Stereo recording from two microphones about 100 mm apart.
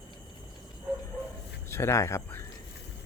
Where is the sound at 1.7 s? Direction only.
25° left (ahead or behind).